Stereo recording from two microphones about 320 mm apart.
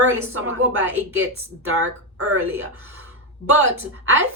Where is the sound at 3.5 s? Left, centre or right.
Right.